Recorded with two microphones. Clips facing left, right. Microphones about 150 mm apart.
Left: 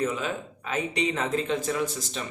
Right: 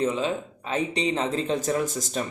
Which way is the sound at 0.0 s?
30° right (ahead or behind).